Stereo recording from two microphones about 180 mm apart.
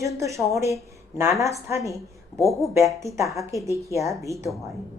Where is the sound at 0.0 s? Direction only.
15° right (ahead or behind).